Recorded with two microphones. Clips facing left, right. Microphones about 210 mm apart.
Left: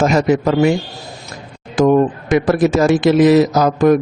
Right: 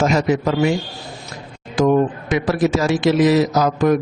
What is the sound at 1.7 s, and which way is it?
A man's voice, 50° left (ahead or behind).